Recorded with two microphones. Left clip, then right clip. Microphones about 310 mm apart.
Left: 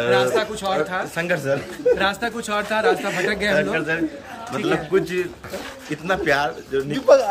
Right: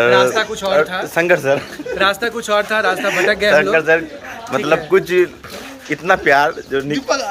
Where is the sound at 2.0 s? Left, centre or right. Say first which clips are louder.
Right 6 dB; centre.